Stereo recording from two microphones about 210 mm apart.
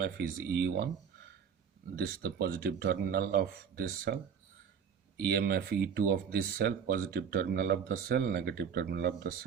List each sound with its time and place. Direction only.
0.0 s speech: 50° right (ahead or behind)
2.0 s speech: 45° right (ahead or behind)